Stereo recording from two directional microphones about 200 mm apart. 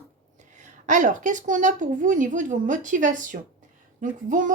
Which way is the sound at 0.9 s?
40° right (ahead or behind).